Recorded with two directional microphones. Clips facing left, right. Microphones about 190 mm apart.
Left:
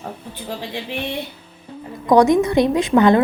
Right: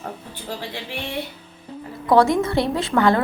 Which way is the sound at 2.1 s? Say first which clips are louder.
Left 3 dB; 15° left (ahead or behind).